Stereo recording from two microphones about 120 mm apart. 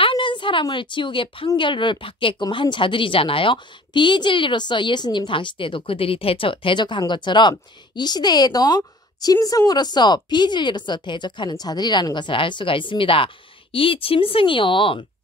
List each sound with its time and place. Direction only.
0.0 s a woman's voice: 45° left (ahead or behind)